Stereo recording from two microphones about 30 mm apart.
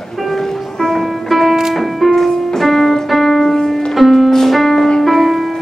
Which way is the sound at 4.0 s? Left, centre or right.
Centre.